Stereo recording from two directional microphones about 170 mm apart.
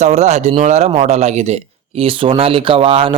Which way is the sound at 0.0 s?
40° right (ahead or behind).